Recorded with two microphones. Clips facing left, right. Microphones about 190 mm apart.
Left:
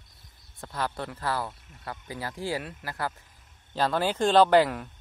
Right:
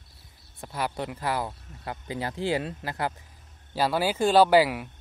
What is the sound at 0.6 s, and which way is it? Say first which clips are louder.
Speech: right 2 dB; 15° right (ahead or behind).